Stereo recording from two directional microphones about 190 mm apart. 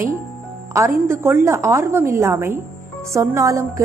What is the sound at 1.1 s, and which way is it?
A woman's voice, 10° right (ahead or behind).